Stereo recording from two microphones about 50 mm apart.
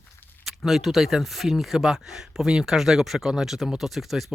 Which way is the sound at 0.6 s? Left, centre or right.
Centre.